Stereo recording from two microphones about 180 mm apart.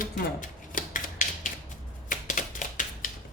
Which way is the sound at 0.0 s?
50° left (ahead or behind).